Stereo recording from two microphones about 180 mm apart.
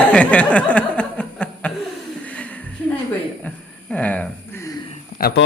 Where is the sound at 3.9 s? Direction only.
10° left (ahead or behind).